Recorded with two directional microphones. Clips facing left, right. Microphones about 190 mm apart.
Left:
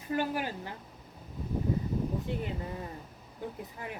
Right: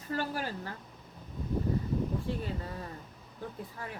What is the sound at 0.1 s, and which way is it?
Speech, 15° left (ahead or behind).